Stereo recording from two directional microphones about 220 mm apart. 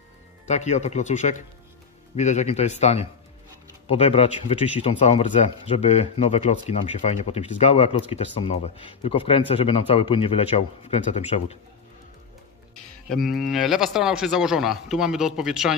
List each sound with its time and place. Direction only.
0.5 s speech: 30° left (ahead or behind)
13.1 s speech: centre (ahead or behind)